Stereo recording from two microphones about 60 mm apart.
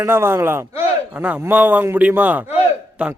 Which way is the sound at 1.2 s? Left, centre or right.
Right.